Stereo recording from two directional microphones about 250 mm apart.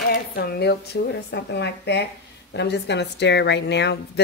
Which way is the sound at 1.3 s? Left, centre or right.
Left.